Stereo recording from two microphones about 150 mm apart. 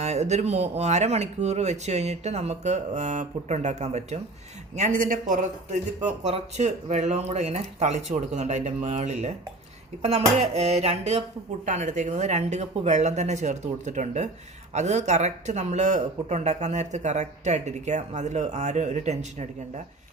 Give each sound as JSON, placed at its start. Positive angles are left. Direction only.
{"t": 0.0, "sound": "speech", "side_deg": -50}
{"t": 4.9, "sound": "speech", "side_deg": -65}
{"t": 6.0, "sound": "speech", "side_deg": -50}